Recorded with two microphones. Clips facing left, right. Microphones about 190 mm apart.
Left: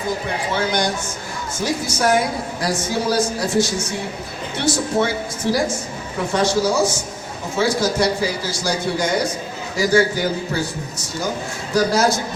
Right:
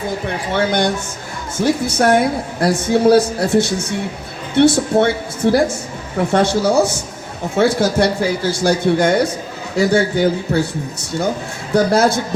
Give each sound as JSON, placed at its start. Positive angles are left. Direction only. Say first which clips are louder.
{"t": 0.5, "sound": "speech", "louder": "right 5 dB", "side_deg": -55}
{"t": 11.7, "sound": "speech", "louder": "right 4 dB", "side_deg": -60}